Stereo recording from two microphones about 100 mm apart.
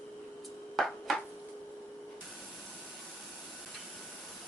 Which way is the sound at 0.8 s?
Centre (ahead or behind).